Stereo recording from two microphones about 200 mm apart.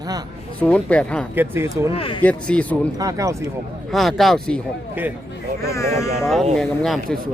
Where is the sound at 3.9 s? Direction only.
Centre (ahead or behind).